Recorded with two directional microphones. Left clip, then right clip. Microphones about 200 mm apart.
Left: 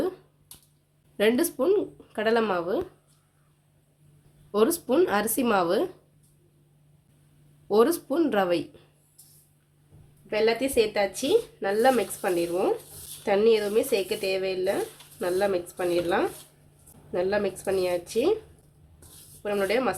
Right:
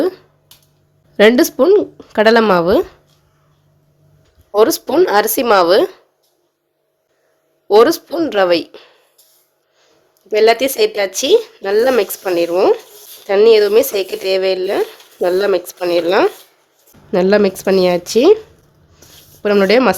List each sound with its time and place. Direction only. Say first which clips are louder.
1.1 s a woman's voice: right 14 dB; 30° right (ahead or behind)
4.5 s a woman's voice: right 11 dB; 30° right (ahead or behind)
7.7 s a woman's voice: right 12 dB; 30° right (ahead or behind)
10.2 s speech: right 13 dB; 55° right (ahead or behind)
19.4 s speech: right 14 dB; 50° right (ahead or behind)